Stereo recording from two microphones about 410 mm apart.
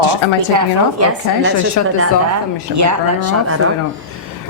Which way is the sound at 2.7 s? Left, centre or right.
Right.